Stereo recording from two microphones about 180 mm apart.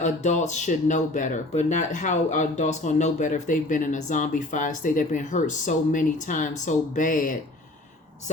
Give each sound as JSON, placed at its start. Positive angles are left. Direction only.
{"t": 0.0, "sound": "speech", "side_deg": 40}